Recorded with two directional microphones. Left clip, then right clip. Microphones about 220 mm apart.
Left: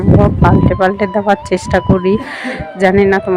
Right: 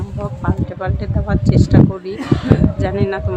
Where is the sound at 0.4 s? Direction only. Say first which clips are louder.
Left 12 dB; 35° left (ahead or behind).